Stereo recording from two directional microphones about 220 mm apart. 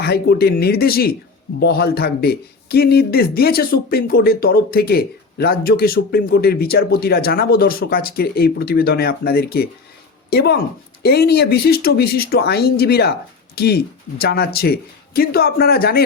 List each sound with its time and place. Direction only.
0.0 s a man's voice: 45° left (ahead or behind)